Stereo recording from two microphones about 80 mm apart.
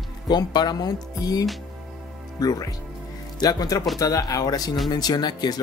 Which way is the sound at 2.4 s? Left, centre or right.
Left.